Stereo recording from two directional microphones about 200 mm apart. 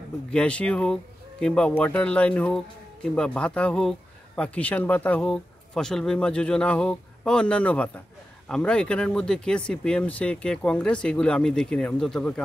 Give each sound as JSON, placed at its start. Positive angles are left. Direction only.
{"t": 0.3, "sound": "speech", "side_deg": 5}